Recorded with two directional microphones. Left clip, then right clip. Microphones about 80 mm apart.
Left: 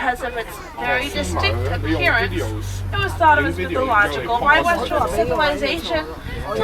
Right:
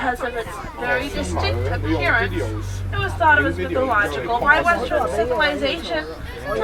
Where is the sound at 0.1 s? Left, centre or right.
Left.